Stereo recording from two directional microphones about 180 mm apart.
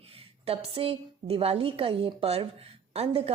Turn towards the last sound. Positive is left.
turn(degrees=-35)  # may be behind; listen again after turning